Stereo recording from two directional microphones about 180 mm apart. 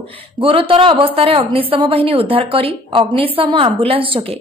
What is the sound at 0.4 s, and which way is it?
A woman's voice, 30° right (ahead or behind).